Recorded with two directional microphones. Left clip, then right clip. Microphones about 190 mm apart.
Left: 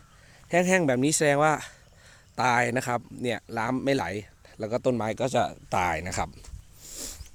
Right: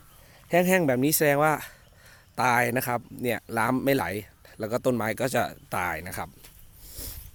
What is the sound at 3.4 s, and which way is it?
Speech, 15° right (ahead or behind).